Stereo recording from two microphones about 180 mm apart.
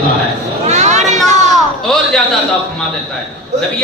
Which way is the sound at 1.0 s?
Centre (ahead or behind).